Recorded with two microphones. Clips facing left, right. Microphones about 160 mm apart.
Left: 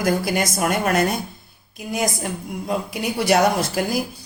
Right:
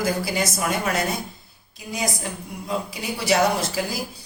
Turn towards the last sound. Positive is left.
turn(degrees=55)  # may be behind; listen again after turning